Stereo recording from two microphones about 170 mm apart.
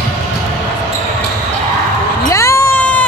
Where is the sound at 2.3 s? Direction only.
15° left (ahead or behind).